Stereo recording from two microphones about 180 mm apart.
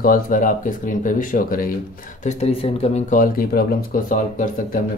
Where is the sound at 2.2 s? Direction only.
35° left (ahead or behind).